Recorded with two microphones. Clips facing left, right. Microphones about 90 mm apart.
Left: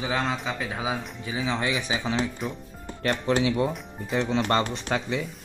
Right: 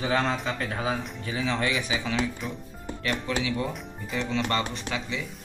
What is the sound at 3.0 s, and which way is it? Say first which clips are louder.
Speech: left 5 dB; 40° left (ahead or behind).